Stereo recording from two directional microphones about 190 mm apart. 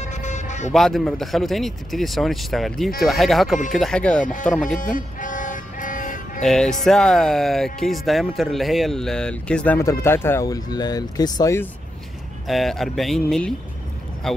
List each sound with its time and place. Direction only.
0.0 s music: 40° left (ahead or behind)
0.7 s speech: centre (ahead or behind)
4.6 s vehicle: 45° left (ahead or behind)
6.4 s speech: 5° left (ahead or behind)
12.4 s speech: centre (ahead or behind)